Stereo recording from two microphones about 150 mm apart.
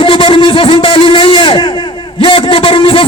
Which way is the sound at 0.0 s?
35° left (ahead or behind).